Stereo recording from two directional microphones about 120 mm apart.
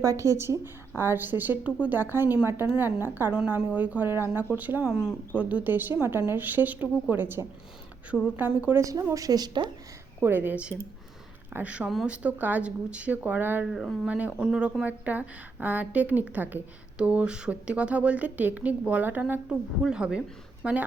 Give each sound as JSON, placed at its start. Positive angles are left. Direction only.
{"t": 0.0, "sound": "a woman's voice", "side_deg": -25}
{"t": 8.8, "sound": "speech", "side_deg": -25}
{"t": 10.2, "sound": "a woman's voice", "side_deg": -20}
{"t": 13.7, "sound": "speech", "side_deg": 0}
{"t": 14.1, "sound": "a woman's voice", "side_deg": -10}